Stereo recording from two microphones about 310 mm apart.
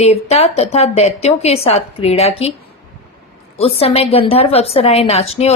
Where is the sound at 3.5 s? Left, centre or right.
Centre.